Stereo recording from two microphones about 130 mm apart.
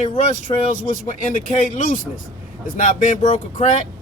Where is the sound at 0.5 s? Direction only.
40° left (ahead or behind).